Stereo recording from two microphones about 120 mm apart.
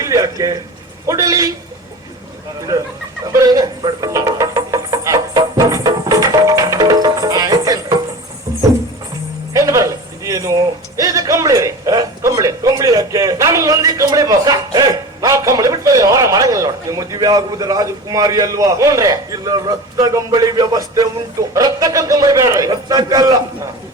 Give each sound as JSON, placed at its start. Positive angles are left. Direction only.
{"t": 0.0, "sound": "a man's voice", "side_deg": -30}
{"t": 3.3, "sound": "music", "side_deg": -30}
{"t": 9.5, "sound": "a sound", "side_deg": -25}